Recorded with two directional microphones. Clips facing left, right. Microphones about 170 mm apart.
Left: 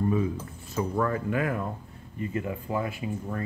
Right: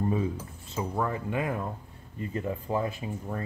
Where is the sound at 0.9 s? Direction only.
15° right (ahead or behind).